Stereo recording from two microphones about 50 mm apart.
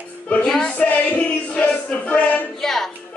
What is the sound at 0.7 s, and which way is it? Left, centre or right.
Music, left.